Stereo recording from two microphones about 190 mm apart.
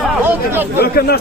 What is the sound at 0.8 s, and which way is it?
Speech, 55° left (ahead or behind).